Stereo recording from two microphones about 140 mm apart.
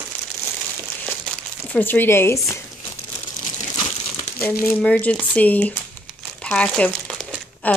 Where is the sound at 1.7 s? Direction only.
15° left (ahead or behind).